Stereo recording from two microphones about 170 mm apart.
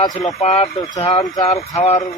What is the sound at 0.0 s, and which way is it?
Speech, 25° left (ahead or behind).